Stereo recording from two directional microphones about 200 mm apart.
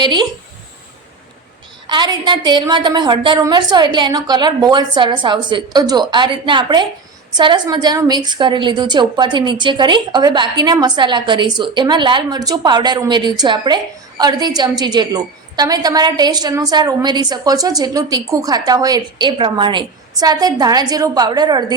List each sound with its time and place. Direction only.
0.0 s a woman's voice: 20° right (ahead or behind)
1.9 s a woman's voice: 25° right (ahead or behind)